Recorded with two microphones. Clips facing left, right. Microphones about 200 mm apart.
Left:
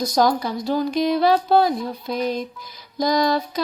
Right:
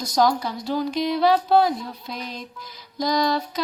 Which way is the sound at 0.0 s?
45° left (ahead or behind).